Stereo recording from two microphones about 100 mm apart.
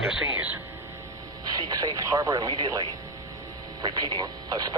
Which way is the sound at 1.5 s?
40° right (ahead or behind).